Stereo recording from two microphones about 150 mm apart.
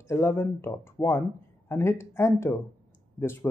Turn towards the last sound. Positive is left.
turn(degrees=15)  # may be behind; listen again after turning